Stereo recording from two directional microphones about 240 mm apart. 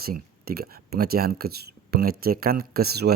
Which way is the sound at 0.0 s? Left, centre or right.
Right.